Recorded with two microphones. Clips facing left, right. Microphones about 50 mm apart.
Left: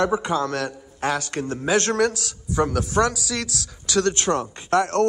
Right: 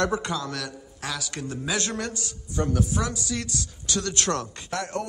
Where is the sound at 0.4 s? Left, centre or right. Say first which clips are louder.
Left 8 dB; left.